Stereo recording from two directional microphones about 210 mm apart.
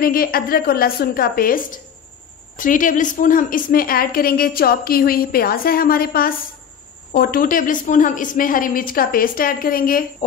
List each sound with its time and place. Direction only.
0.0 s a woman's voice: 45° left (ahead or behind)